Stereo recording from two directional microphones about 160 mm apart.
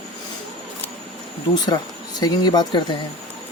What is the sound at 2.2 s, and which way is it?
Speech, 25° left (ahead or behind).